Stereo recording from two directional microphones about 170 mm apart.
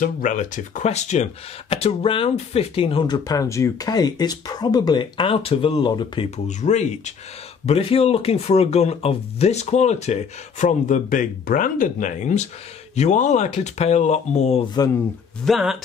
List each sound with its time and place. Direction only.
0.0 s speech: 50° left (ahead or behind); by 6.2 s 25° left (ahead or behind)
6.3 s speech: 45° left (ahead or behind)
15.4 s speech: centre (ahead or behind)